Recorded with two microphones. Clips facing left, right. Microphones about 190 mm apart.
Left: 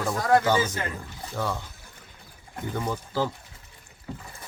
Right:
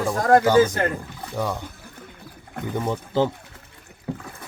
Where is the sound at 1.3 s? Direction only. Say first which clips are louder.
Right 3 dB; 15° right (ahead or behind).